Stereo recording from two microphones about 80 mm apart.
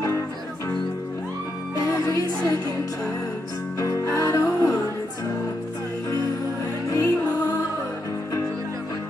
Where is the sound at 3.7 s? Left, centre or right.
Left.